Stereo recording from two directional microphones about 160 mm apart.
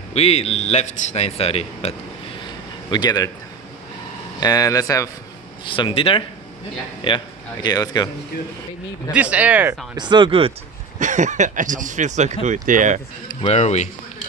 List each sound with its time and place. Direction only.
0.1 s speech: 40° left (ahead or behind)
2.9 s speech: 25° left (ahead or behind)
4.4 s speech: 25° left (ahead or behind)
5.7 s speech: 35° left (ahead or behind)
9.1 s speech: 10° right (ahead or behind)
9.9 s speech: 30° right (ahead or behind)
11.0 s speech: 50° right (ahead or behind)
13.3 s speech: 40° left (ahead or behind)